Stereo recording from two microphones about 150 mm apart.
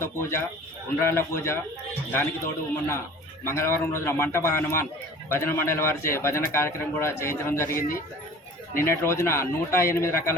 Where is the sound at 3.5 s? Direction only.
15° left (ahead or behind).